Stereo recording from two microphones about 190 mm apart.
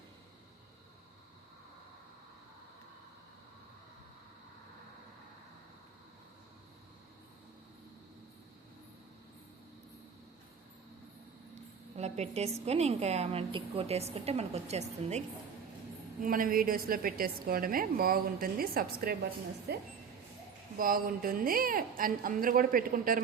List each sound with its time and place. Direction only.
11.9 s a sound: 35° right (ahead or behind)
12.6 s a woman's voice: 35° right (ahead or behind)
16.2 s a woman's voice: 45° right (ahead or behind)
20.7 s a woman's voice: 50° right (ahead or behind)